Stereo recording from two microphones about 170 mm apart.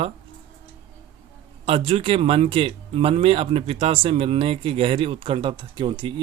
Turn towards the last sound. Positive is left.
turn(degrees=-30)  # may be behind; listen again after turning